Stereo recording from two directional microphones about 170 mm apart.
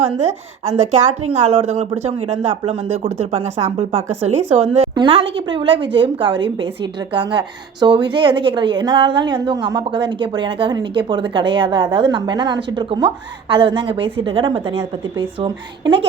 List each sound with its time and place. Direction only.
0.7 s a woman's voice: 45° right (ahead or behind)